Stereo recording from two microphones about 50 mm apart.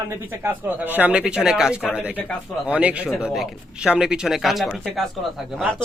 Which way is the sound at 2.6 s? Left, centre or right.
Right.